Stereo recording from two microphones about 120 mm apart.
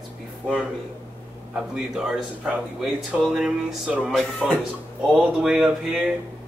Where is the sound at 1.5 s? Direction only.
5° right (ahead or behind).